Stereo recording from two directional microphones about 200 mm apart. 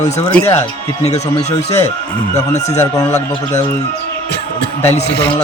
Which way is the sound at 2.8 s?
15° left (ahead or behind).